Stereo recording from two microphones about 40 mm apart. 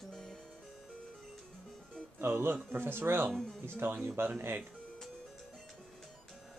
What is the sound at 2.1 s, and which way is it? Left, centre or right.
Speech, right.